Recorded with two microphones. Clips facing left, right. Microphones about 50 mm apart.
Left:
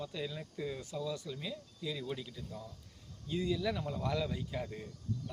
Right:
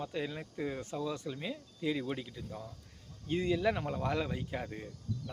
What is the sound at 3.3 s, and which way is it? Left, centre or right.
Speech, right.